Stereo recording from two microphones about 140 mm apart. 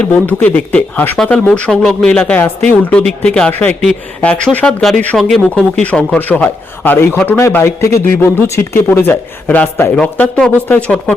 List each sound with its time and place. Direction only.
0.1 s a man's voice: 15° left (ahead or behind)